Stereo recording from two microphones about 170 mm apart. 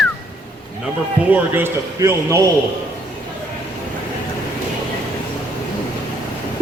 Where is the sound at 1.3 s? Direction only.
10° right (ahead or behind).